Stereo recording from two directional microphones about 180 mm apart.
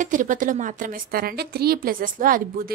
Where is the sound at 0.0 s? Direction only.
45° right (ahead or behind).